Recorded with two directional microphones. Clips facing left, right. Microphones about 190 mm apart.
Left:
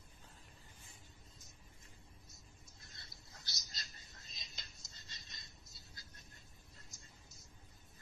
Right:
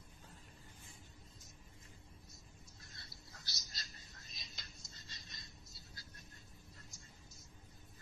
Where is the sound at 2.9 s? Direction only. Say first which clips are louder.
Right 1 dB; 20° left (ahead or behind).